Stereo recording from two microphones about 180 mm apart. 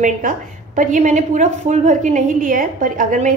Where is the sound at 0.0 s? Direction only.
45° right (ahead or behind).